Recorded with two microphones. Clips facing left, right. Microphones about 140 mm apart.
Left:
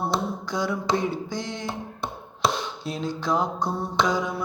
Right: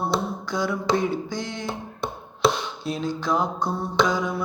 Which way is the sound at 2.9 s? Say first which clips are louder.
Right 1 dB; 35° left (ahead or behind).